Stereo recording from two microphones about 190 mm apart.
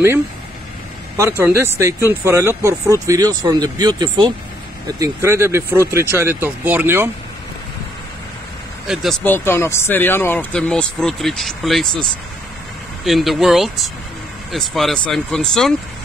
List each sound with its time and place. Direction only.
1.1 s speech: 15° right (ahead or behind)
8.8 s speech: centre (ahead or behind)
9.2 s speech: 10° left (ahead or behind)